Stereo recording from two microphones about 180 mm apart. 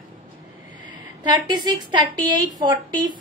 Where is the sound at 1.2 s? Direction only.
25° right (ahead or behind).